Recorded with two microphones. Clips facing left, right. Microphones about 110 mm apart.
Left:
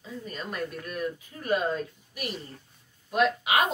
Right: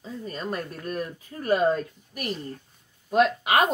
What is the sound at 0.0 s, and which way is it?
Speech, 35° right (ahead or behind).